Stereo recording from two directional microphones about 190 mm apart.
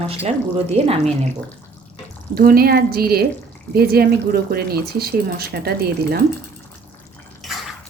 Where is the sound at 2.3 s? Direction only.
50° right (ahead or behind).